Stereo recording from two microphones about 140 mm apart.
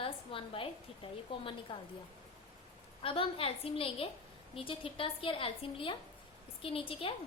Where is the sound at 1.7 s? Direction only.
40° left (ahead or behind).